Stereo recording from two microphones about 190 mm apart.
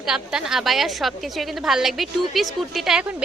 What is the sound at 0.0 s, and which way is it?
Speech, 5° right (ahead or behind).